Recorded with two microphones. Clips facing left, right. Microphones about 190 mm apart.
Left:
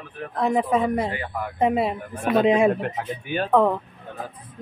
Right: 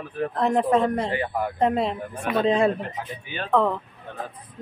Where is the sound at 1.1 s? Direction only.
30° right (ahead or behind).